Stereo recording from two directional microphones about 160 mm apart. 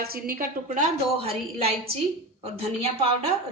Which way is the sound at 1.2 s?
40° right (ahead or behind).